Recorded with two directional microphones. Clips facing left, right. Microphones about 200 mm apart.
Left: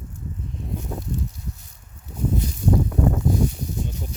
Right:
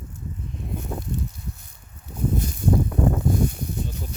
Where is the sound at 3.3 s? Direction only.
55° right (ahead or behind).